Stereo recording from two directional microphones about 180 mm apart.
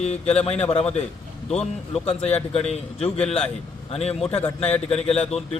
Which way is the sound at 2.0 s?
35° left (ahead or behind).